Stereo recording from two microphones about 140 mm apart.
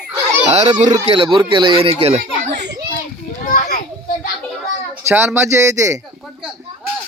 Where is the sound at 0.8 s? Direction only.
60° right (ahead or behind).